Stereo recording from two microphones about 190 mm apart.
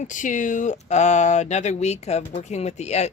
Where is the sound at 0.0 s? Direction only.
40° left (ahead or behind).